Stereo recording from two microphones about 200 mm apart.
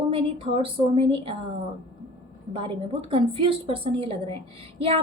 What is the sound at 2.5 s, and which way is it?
A woman's voice, 25° right (ahead or behind).